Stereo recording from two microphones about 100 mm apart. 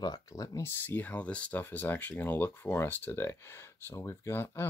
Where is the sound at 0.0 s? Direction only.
40° left (ahead or behind).